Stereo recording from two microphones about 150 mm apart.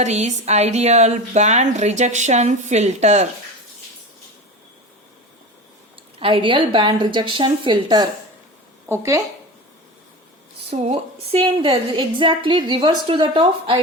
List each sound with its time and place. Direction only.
0.0 s speech: 50° right (ahead or behind)
6.1 s a woman's voice: 35° right (ahead or behind)
8.9 s speech: 20° right (ahead or behind)
10.7 s a woman's voice: 45° right (ahead or behind)